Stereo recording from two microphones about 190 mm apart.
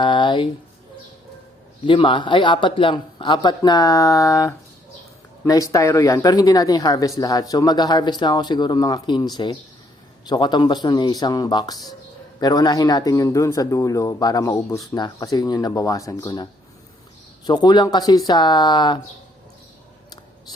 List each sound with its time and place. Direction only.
0.0 s speech: 25° left (ahead or behind)
1.9 s speech: 25° left (ahead or behind)